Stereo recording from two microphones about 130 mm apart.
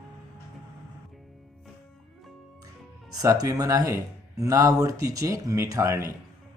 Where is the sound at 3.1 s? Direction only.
30° right (ahead or behind).